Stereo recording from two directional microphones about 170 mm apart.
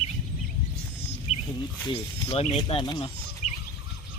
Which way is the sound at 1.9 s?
35° left (ahead or behind).